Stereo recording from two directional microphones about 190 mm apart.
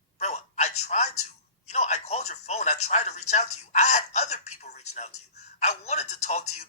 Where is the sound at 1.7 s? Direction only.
35° left (ahead or behind).